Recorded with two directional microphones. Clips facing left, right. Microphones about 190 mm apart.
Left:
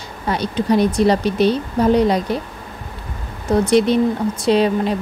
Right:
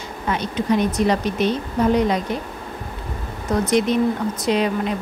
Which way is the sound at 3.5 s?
30° left (ahead or behind).